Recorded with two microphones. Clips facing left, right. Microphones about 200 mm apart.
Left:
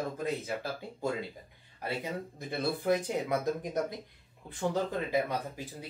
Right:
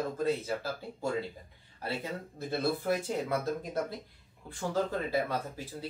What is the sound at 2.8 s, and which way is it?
Speech, 15° left (ahead or behind).